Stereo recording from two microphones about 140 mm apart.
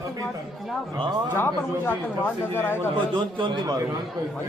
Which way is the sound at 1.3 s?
15° left (ahead or behind).